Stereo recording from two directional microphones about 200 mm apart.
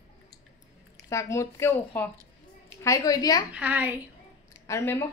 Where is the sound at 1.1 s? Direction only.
15° left (ahead or behind).